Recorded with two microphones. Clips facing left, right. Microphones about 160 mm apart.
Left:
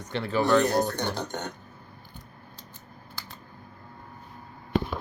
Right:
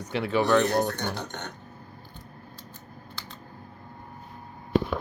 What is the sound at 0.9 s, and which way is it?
Speech, 15° left (ahead or behind).